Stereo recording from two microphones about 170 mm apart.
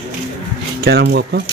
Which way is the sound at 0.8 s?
75° right (ahead or behind).